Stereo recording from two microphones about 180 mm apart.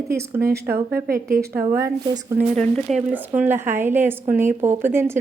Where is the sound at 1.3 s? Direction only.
15° right (ahead or behind).